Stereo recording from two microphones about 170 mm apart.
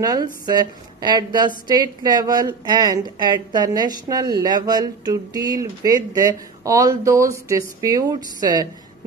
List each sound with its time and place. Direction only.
0.0 s a woman's voice: 25° right (ahead or behind)